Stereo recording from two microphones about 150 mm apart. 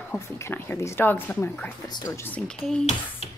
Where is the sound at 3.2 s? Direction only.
45° left (ahead or behind).